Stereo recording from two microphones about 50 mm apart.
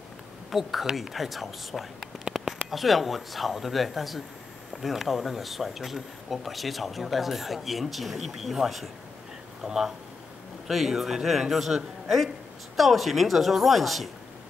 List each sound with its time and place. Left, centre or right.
0.5 s speech: centre
2.3 s a sound: right
2.7 s speech: centre